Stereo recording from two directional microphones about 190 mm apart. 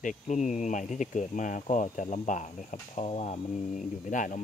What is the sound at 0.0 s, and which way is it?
Speech, 40° left (ahead or behind).